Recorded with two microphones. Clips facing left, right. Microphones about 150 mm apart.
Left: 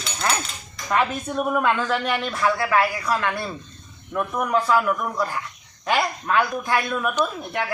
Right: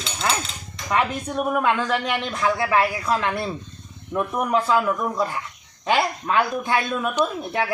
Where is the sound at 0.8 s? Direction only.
10° right (ahead or behind).